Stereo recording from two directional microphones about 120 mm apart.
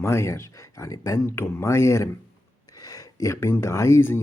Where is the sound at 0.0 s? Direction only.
25° left (ahead or behind).